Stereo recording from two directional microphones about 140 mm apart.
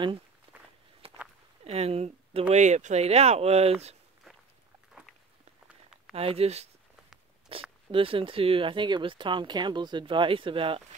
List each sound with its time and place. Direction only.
0.5 s walk: 35° right (ahead or behind)
1.6 s speech: 50° right (ahead or behind)
2.5 s speech: 55° right (ahead or behind)
6.1 s speech: 45° right (ahead or behind)